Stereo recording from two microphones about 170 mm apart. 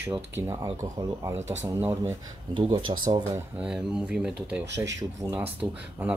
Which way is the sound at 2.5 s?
30° right (ahead or behind).